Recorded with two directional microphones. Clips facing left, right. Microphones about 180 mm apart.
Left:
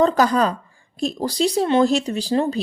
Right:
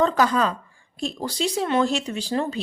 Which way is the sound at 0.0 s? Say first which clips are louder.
Left 3 dB; 40° left (ahead or behind).